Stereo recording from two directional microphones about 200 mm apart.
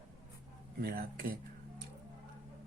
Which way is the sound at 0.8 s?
50° right (ahead or behind).